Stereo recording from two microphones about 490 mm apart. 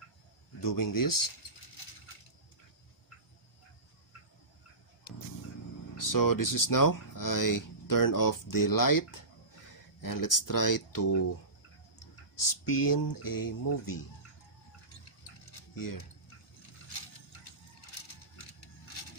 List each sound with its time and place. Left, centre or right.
0.6 s speech: left
5.9 s speech: left
12.4 s speech: left
15.7 s speech: left